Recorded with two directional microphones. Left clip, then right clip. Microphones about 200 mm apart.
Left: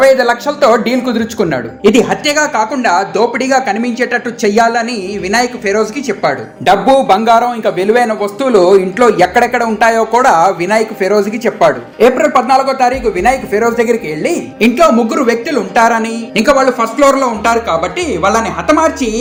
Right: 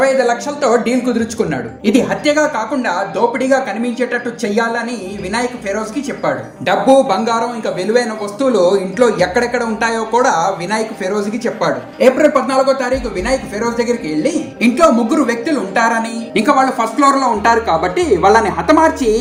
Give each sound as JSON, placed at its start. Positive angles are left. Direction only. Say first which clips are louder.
{"t": 0.0, "sound": "speech", "louder": "left 5 dB", "side_deg": 30}
{"t": 14.6, "sound": "a woman's voice", "louder": "left 3 dB", "side_deg": 25}